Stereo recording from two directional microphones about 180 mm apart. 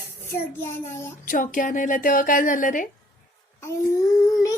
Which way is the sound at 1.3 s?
45° left (ahead or behind).